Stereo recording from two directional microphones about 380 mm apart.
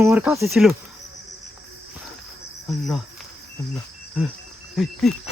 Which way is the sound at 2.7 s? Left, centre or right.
Centre.